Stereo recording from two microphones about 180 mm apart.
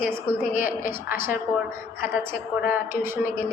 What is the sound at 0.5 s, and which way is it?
Speech, 50° left (ahead or behind).